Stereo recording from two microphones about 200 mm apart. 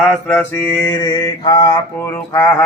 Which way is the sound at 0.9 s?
20° left (ahead or behind).